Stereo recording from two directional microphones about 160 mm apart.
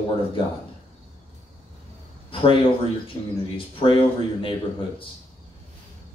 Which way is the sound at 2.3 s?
35° left (ahead or behind).